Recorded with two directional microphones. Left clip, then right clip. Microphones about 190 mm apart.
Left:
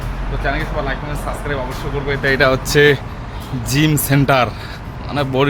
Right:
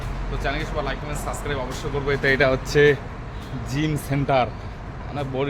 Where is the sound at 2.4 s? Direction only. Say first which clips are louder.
Left 7 dB; centre (ahead or behind).